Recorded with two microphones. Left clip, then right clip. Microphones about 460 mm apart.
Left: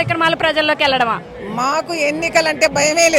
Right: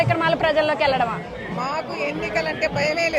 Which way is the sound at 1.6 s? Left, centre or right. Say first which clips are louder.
Left 8 dB; left.